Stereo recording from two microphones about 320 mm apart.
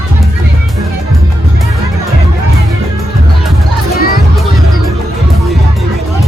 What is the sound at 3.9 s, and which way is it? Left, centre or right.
Music, left.